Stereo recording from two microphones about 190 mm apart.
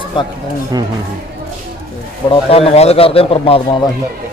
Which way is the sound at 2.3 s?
30° left (ahead or behind).